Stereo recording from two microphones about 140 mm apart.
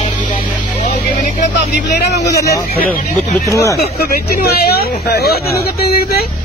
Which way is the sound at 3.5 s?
20° left (ahead or behind).